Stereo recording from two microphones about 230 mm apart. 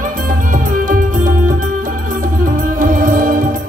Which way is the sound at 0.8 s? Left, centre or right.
Right.